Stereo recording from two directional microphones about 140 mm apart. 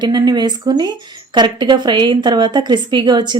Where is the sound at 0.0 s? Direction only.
30° right (ahead or behind).